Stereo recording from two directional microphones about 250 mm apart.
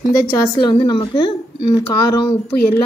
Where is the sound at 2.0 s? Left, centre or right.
Left.